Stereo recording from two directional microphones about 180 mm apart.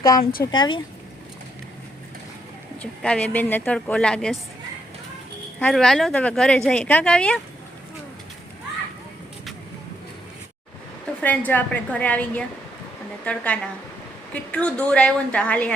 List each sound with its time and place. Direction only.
0.2 s speech: 55° left (ahead or behind)
0.5 s speech: 25° left (ahead or behind)
2.8 s a woman's voice: 5° left (ahead or behind)
5.5 s speech: 5° left (ahead or behind)
11.2 s a woman's voice: 10° left (ahead or behind)